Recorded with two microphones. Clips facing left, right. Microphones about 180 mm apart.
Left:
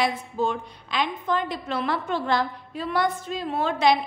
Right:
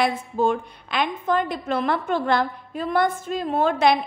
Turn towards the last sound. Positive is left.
turn(degrees=-50)  # may be behind; listen again after turning